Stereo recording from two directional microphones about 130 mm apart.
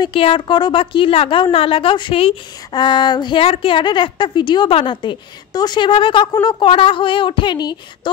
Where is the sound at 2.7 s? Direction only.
35° left (ahead or behind).